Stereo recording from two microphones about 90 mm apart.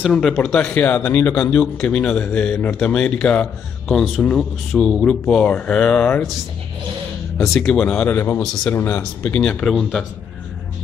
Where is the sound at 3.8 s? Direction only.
5° right (ahead or behind).